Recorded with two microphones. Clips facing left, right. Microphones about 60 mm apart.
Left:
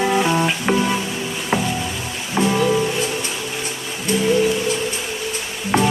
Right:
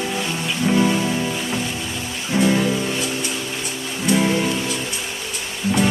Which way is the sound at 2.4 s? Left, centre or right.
Left.